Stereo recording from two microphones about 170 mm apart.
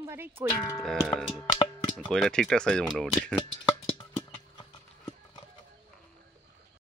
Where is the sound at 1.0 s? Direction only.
Centre (ahead or behind).